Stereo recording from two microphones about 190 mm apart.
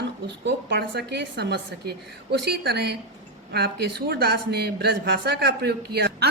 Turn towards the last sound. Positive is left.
turn(degrees=-60)  # may be behind; listen again after turning